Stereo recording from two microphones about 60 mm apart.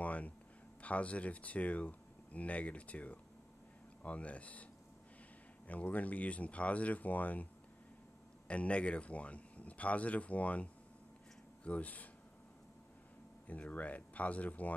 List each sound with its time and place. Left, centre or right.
0.0 s a sound: left
0.8 s speech: left
5.7 s speech: left
8.5 s speech: left
13.5 s speech: left